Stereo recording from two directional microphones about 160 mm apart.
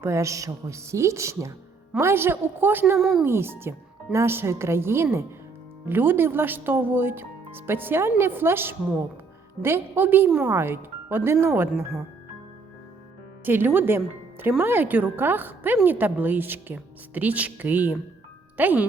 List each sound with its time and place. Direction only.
0.0 s a woman's voice: 20° right (ahead or behind)
3.2 s a woman's voice: 15° right (ahead or behind)
13.4 s a woman's voice: 10° right (ahead or behind)